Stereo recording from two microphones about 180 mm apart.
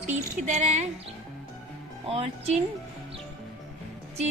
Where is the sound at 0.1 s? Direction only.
40° right (ahead or behind).